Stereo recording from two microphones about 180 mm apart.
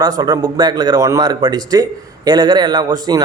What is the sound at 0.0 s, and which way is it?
Speech, 20° right (ahead or behind).